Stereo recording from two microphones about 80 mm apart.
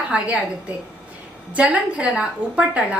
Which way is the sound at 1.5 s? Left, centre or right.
Centre.